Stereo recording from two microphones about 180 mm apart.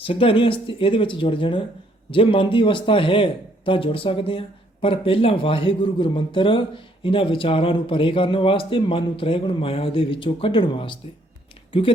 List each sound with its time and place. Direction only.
0.0 s speech: 30° left (ahead or behind)